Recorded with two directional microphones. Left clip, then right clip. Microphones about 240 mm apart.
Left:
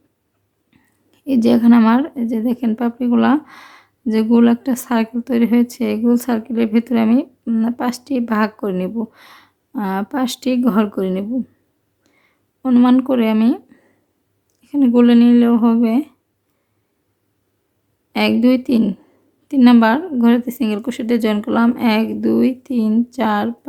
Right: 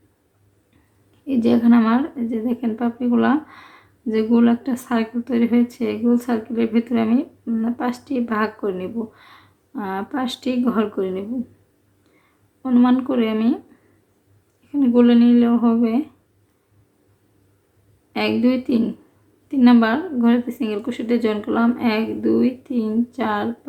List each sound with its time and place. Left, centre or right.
1.3 s a woman's voice: left
12.6 s a woman's voice: left
14.7 s a woman's voice: left
18.1 s a woman's voice: left